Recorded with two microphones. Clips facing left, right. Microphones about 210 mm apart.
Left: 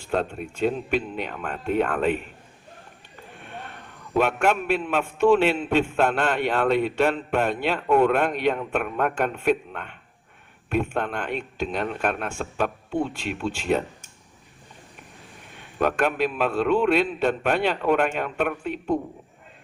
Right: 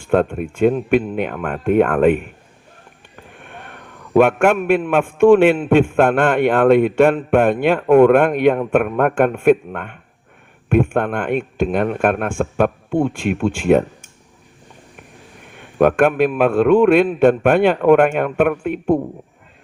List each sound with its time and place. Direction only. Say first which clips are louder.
0.0 s a man's voice: right 9 dB; 50° right (ahead or behind)
3.4 s a man's voice: right 1 dB; 55° right (ahead or behind)
15.8 s a man's voice: right 9 dB; 55° right (ahead or behind)